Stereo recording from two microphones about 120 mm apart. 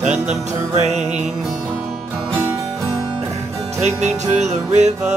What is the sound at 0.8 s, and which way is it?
Music, 70° right (ahead or behind).